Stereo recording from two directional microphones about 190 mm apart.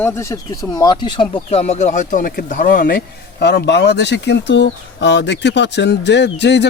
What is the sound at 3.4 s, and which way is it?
Speech, 60° left (ahead or behind).